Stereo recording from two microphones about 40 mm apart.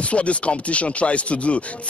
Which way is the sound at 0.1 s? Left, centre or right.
Left.